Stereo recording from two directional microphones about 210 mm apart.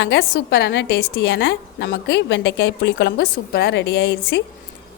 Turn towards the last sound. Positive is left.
turn(degrees=55)  # may be behind; listen again after turning